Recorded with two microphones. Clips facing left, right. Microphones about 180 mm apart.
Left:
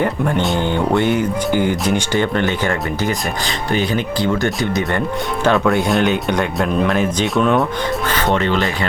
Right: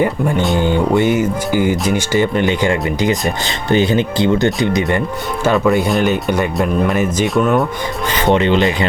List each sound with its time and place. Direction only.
0.0 s speech: 10° right (ahead or behind)
5.4 s speech: 5° right (ahead or behind)
8.4 s speech: 20° right (ahead or behind)